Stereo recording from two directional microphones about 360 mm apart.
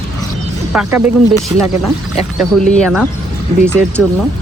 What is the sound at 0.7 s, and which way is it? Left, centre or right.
Speech, centre.